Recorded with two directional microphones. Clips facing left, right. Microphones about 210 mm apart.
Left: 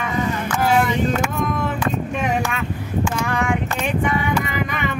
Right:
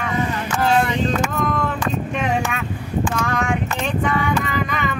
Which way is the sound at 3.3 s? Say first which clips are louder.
Even; 10° left (ahead or behind).